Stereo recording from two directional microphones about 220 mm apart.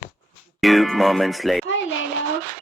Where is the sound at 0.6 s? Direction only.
Centre (ahead or behind).